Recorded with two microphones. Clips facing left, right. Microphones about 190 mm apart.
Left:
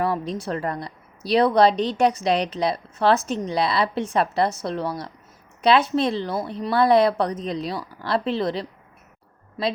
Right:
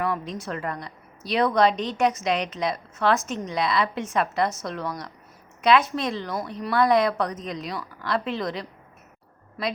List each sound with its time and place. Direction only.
0.0 s a woman's voice: 30° left (ahead or behind)
9.6 s speech: 20° left (ahead or behind)